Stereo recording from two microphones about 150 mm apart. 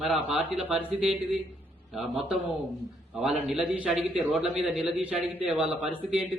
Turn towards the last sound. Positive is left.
turn(degrees=-5)  # may be behind; listen again after turning